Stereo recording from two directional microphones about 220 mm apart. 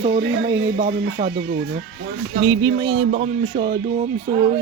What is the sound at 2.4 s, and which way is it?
Speech, 15° right (ahead or behind).